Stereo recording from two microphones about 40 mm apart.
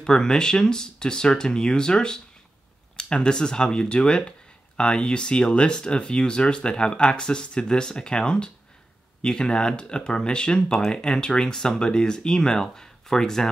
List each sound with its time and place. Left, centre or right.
0.0 s speech: centre